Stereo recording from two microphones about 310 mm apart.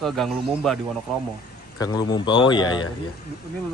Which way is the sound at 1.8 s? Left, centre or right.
Centre.